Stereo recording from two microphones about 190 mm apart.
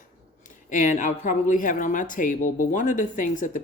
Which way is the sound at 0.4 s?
40° left (ahead or behind).